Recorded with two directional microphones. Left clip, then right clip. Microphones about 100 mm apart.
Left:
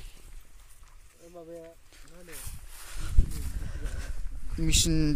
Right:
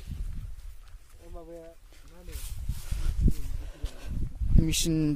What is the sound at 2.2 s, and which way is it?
Speech, 50° left (ahead or behind).